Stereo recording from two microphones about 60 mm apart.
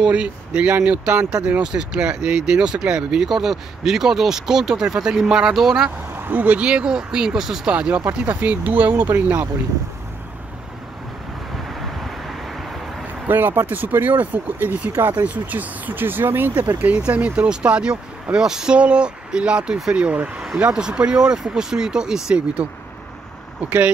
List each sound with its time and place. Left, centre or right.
0.0 s speech: centre
6.1 s a sound: right
6.4 s speech: right
7.7 s speech: right
13.3 s speech: right
16.5 s speech: centre
23.6 s speech: right